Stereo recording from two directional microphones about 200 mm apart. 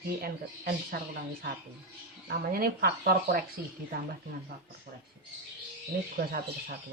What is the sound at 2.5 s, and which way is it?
Speech, 50° right (ahead or behind).